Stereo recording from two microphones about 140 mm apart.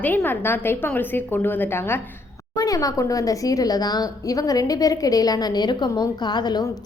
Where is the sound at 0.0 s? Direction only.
15° left (ahead or behind).